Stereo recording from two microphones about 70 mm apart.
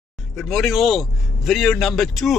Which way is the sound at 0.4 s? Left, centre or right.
Centre.